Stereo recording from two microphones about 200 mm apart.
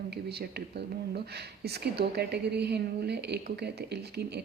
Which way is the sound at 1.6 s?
55° right (ahead or behind).